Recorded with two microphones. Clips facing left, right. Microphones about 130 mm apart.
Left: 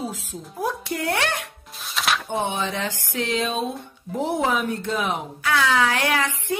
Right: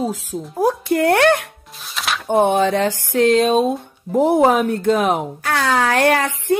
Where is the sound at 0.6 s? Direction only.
50° right (ahead or behind).